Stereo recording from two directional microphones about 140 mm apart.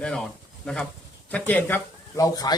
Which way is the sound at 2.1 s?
25° left (ahead or behind).